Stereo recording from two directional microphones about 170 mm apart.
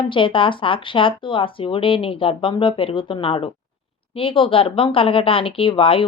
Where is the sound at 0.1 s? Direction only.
30° left (ahead or behind).